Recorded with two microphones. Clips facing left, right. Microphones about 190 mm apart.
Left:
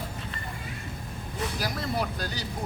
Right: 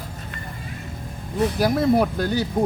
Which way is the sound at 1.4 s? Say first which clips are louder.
Right 12 dB; 55° right (ahead or behind).